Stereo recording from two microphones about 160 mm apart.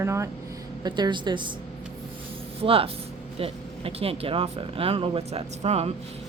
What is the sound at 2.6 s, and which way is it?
A woman's voice, 35° right (ahead or behind).